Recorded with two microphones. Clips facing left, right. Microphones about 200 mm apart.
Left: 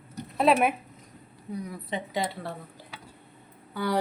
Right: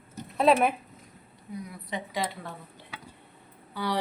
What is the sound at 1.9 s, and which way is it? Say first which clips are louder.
Speech: left 1 dB; 25° left (ahead or behind).